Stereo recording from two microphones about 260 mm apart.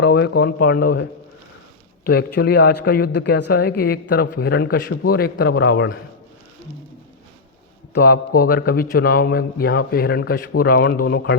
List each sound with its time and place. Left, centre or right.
0.0 s speech: left
2.0 s a man's voice: left
7.9 s a man's voice: left